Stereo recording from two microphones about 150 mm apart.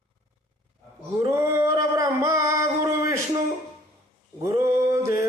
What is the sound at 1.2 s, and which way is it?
Male singing, 20° right (ahead or behind).